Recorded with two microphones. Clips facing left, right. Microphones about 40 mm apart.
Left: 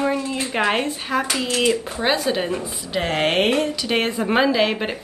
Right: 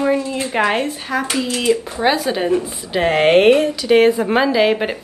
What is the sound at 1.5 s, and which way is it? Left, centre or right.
Speech, left.